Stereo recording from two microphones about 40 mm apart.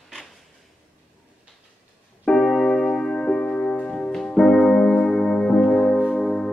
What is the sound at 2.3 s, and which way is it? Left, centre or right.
Music, centre.